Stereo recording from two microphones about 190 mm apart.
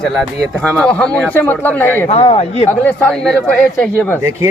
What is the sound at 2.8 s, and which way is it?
A man's voice, 5° left (ahead or behind).